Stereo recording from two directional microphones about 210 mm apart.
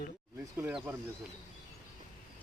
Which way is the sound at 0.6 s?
10° right (ahead or behind).